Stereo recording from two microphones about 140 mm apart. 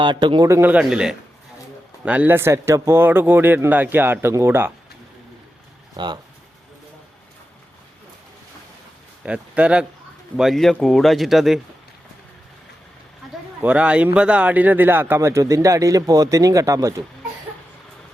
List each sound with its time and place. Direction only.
0.0 s a man's voice: 35° right (ahead or behind)
0.4 s speech: 20° right (ahead or behind)
0.7 s a man's voice: 5° right (ahead or behind)
6.0 s a man's voice: 35° right (ahead or behind)
9.2 s a man's voice: 10° right (ahead or behind)
13.2 s a sound: centre (ahead or behind)
13.6 s speech: 10° right (ahead or behind); by 16.9 s 25° right (ahead or behind)